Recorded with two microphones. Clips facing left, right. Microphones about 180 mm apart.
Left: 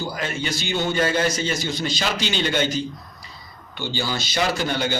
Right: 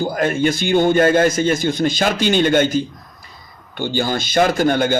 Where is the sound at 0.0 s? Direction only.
50° right (ahead or behind).